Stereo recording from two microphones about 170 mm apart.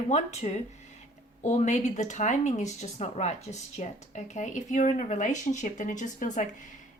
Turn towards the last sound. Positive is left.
turn(degrees=45)  # may be behind; listen again after turning